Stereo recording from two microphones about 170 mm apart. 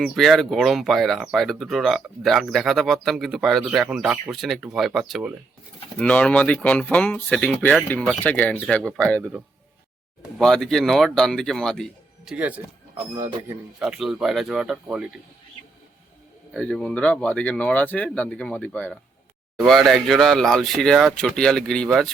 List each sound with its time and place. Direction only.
0.0 s speech: centre (ahead or behind)
10.3 s speech: centre (ahead or behind)
13.7 s speech: 5° right (ahead or behind)
16.6 s speech: 5° left (ahead or behind)